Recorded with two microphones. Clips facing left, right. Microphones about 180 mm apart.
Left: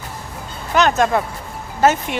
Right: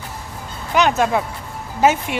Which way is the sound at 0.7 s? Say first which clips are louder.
Left 1 dB; 10° right (ahead or behind).